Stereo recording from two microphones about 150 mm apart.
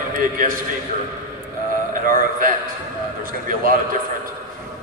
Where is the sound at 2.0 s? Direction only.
65° right (ahead or behind).